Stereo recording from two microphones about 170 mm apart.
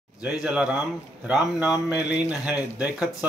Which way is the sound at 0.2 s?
5° right (ahead or behind).